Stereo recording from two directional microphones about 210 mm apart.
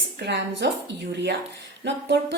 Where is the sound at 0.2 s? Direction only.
55° right (ahead or behind).